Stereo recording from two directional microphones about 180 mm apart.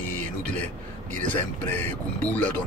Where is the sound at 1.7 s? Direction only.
10° left (ahead or behind).